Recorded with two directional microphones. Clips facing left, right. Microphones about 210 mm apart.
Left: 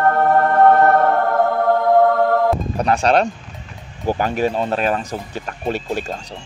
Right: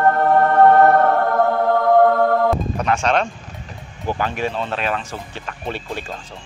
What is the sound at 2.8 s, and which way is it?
Speech, 35° left (ahead or behind).